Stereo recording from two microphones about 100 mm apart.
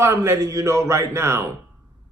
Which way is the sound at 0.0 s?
30° right (ahead or behind).